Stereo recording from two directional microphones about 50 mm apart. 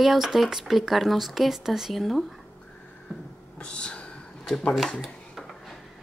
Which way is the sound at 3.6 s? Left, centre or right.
Centre.